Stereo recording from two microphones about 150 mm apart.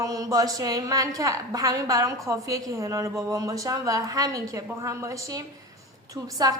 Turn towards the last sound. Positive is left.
turn(degrees=-25)  # may be behind; listen again after turning